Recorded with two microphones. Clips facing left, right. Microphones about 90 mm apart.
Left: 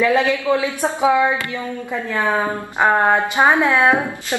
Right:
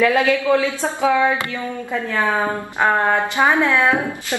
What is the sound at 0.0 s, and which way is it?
A woman's voice, 20° left (ahead or behind).